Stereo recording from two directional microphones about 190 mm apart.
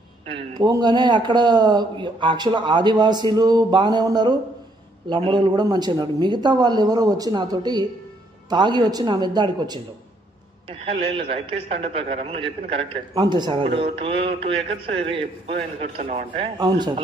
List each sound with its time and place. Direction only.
0.3 s a man's voice: 20° right (ahead or behind); by 16.4 s 40° right (ahead or behind)
16.5 s a man's voice: 25° right (ahead or behind)